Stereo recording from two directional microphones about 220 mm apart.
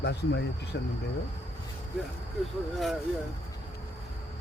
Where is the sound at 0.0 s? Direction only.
50° left (ahead or behind).